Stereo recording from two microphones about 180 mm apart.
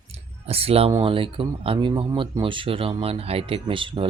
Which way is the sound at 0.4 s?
35° right (ahead or behind).